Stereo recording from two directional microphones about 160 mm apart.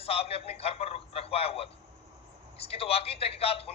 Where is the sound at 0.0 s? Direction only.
40° left (ahead or behind).